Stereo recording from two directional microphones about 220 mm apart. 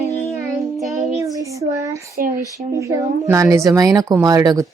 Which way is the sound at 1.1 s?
15° right (ahead or behind).